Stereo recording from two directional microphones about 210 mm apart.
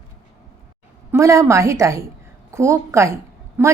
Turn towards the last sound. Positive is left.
turn(degrees=-10)  # may be behind; listen again after turning